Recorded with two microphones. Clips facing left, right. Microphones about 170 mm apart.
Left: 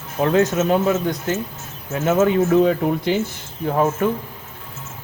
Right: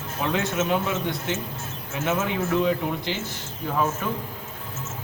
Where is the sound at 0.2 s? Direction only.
40° left (ahead or behind).